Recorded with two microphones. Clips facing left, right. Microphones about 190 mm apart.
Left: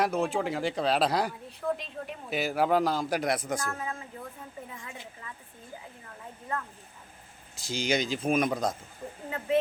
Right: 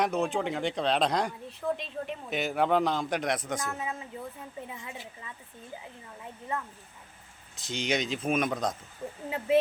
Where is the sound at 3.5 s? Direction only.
15° right (ahead or behind).